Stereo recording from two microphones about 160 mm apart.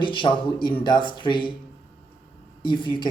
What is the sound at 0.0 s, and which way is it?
Speech, 30° left (ahead or behind).